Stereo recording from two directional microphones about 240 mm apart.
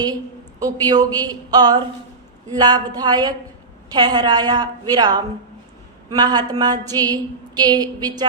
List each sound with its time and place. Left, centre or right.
0.6 s a woman's voice: centre